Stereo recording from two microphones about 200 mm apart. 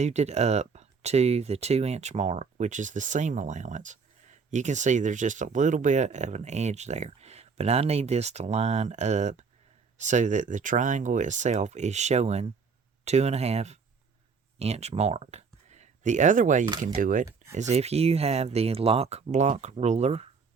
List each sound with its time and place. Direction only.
0.0 s speech: 35° right (ahead or behind)